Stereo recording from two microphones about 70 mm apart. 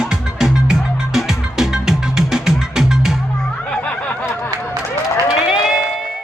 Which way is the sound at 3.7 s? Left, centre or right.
Centre.